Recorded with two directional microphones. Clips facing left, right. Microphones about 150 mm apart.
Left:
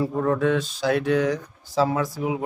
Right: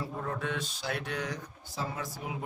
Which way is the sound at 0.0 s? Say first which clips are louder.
Left 13 dB; 90° left.